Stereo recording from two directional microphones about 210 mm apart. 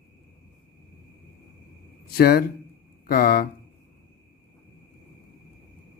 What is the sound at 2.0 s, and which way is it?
Speech, 50° left (ahead or behind).